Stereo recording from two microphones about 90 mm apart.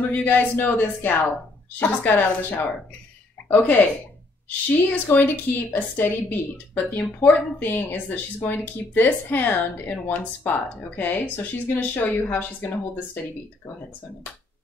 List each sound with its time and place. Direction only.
0.1 s a woman's voice: 20° left (ahead or behind)
4.8 s a woman's voice: 20° left (ahead or behind)